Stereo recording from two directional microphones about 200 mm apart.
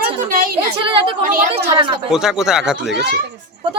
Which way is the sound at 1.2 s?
45° right (ahead or behind).